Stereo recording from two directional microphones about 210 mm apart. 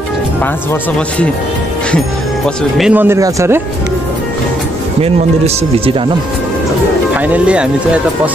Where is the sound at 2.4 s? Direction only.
Centre (ahead or behind).